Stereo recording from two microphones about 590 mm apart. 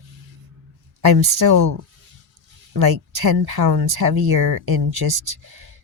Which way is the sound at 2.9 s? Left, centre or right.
Right.